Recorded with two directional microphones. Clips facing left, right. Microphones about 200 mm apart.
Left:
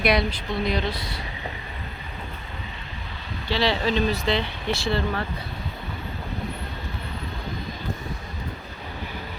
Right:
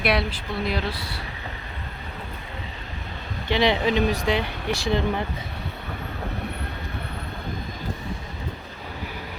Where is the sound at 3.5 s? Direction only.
20° right (ahead or behind).